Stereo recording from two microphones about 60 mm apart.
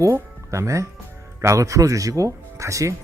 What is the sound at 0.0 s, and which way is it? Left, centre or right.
Speech, right.